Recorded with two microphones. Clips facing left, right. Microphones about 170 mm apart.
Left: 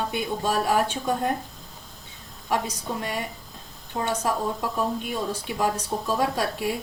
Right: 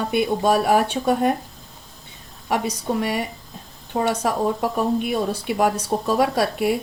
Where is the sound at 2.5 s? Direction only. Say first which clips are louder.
Right 4 dB; 70° right (ahead or behind).